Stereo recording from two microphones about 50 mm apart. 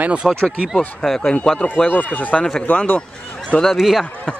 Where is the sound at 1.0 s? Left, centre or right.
Centre.